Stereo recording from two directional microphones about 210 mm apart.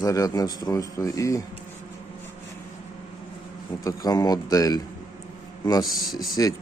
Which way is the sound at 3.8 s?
15° left (ahead or behind).